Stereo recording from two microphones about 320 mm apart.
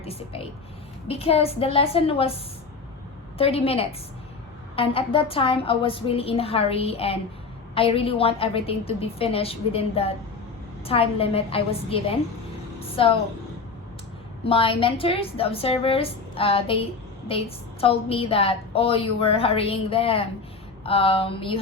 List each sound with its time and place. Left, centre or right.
0.0 s a woman's voice: centre
3.3 s a woman's voice: centre
14.4 s a woman's voice: centre